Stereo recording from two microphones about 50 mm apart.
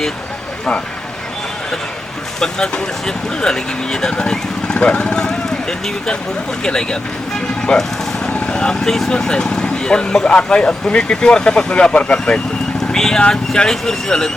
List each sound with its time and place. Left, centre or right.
2.4 s speech: centre